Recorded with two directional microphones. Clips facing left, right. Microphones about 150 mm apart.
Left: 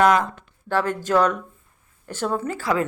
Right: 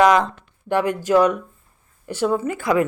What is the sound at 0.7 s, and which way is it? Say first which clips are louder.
Speech: right 3 dB; 15° right (ahead or behind).